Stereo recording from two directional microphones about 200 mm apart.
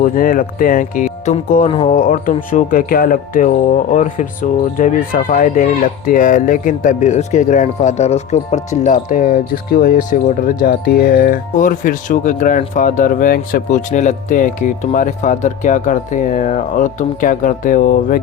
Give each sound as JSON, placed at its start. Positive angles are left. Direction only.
{"t": 0.0, "sound": "speech", "side_deg": 45}
{"t": 1.6, "sound": "speech", "side_deg": 25}
{"t": 1.9, "sound": "speech", "side_deg": 40}